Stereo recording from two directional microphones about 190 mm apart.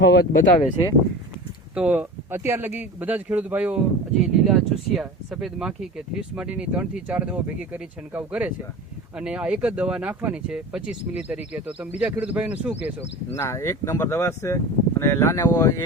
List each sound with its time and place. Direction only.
0.0 s speech: 60° left (ahead or behind)
1.7 s speech: 5° right (ahead or behind)
13.3 s speech: 15° left (ahead or behind)